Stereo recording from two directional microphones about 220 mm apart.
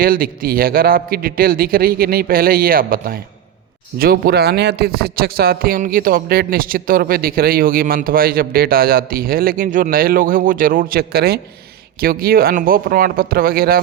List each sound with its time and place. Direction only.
0.0 s a man's voice: 40° right (ahead or behind)